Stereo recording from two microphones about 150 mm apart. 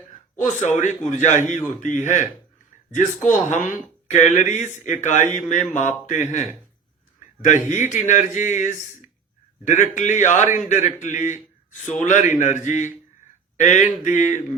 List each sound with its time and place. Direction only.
0.4 s a man's voice: 55° left (ahead or behind)